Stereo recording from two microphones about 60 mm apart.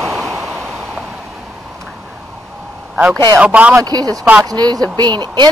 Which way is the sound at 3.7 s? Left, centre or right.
Right.